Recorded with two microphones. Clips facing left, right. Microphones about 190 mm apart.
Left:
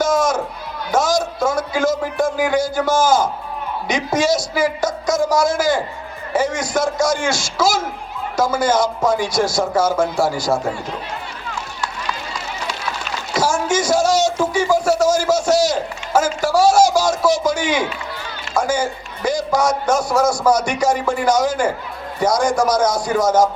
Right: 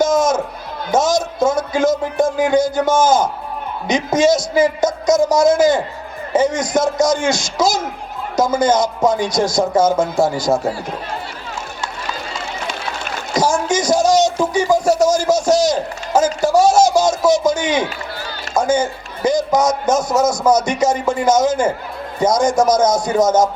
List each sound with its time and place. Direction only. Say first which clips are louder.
0.0 s music: right 2 dB; 20° right (ahead or behind)
0.9 s a man's voice: right 2 dB; 20° right (ahead or behind)
13.3 s speech: right 2 dB; 20° right (ahead or behind)